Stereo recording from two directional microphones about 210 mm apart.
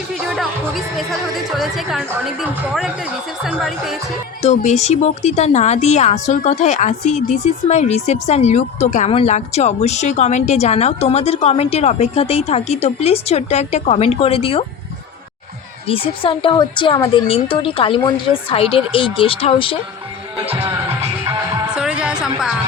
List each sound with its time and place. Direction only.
0.9 s a woman's voice: centre (ahead or behind)
4.4 s speech: 35° left (ahead or behind)
15.9 s a woman's voice: 25° left (ahead or behind)
21.8 s music: 5° right (ahead or behind)